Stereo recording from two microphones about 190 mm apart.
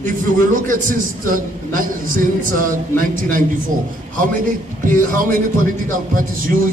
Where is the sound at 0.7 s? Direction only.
45° right (ahead or behind).